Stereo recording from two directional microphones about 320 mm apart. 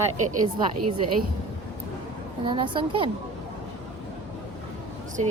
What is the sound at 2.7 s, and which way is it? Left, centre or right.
Speech, centre.